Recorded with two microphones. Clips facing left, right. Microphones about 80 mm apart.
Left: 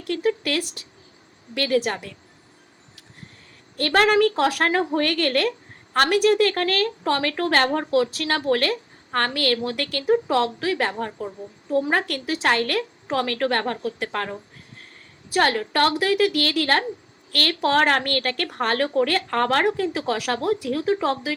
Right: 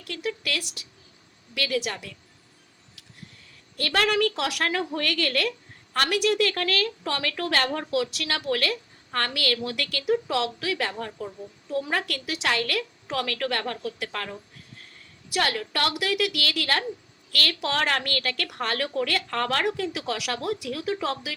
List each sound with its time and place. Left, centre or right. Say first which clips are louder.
0.0 s a woman's voice: left 8 dB; left
3.8 s a woman's voice: left 6 dB; left